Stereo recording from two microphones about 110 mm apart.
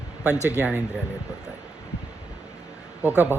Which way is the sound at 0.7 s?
5° right (ahead or behind).